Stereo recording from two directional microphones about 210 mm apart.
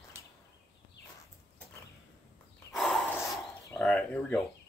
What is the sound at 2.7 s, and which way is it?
Snort, centre (ahead or behind).